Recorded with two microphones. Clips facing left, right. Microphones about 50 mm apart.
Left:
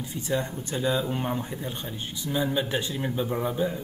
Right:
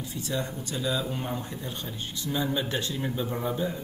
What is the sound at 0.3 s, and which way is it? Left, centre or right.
Speech, left.